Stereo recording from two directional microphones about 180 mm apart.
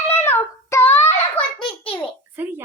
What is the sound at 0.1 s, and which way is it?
Child singing, 10° left (ahead or behind).